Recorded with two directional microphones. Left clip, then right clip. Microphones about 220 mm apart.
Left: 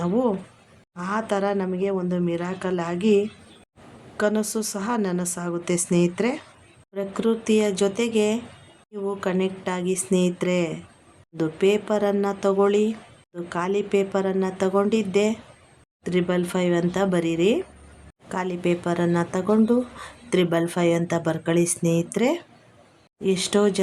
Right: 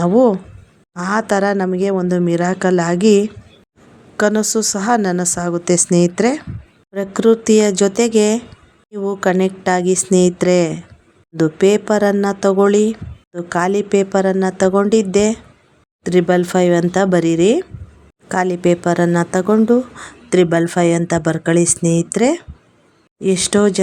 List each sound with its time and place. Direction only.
0.0 s speech: 30° right (ahead or behind)